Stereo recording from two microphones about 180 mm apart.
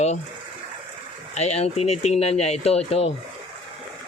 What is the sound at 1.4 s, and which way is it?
Speech, 35° left (ahead or behind).